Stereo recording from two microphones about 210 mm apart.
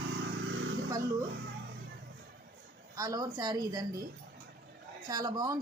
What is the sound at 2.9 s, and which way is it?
A woman's voice, 15° right (ahead or behind).